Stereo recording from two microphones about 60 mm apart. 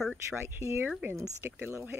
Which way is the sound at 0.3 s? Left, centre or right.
Right.